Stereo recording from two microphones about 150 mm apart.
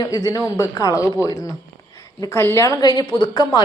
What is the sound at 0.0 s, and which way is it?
A woman's voice, 25° left (ahead or behind).